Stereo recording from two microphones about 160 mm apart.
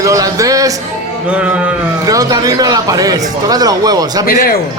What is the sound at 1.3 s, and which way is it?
Speech, 5° right (ahead or behind).